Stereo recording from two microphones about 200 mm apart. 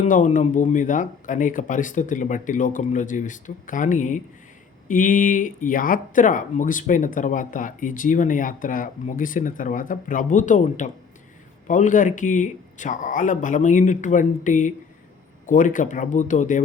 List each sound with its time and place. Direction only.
0.0 s speech: 40° left (ahead or behind)